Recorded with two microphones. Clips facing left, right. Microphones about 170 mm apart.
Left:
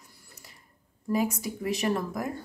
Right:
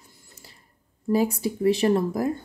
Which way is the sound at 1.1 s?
30° right (ahead or behind).